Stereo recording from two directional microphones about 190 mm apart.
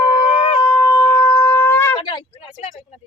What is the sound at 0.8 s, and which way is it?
Shofar, 15° left (ahead or behind).